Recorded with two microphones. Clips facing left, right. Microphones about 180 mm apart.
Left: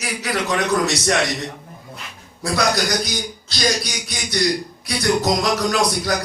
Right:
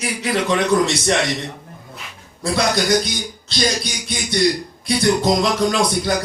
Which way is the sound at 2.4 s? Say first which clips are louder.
Right 2 dB; 25° right (ahead or behind).